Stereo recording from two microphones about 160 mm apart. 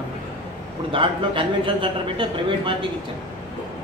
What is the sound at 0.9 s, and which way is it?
A man's voice, 30° right (ahead or behind).